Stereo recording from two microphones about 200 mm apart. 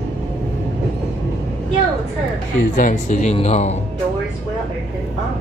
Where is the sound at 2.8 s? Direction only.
40° left (ahead or behind).